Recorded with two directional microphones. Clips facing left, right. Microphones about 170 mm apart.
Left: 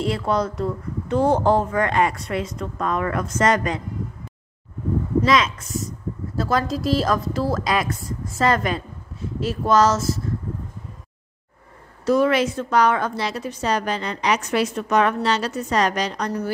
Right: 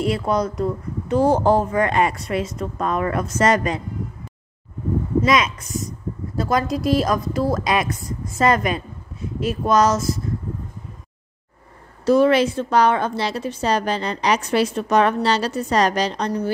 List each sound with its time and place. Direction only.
0.1 s a woman's voice: 20° right (ahead or behind)
5.2 s a woman's voice: 15° right (ahead or behind)
12.0 s a woman's voice: 30° right (ahead or behind)